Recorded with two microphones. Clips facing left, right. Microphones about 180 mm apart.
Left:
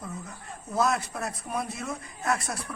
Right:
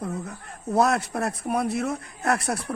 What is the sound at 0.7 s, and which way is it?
Speech, 65° right (ahead or behind).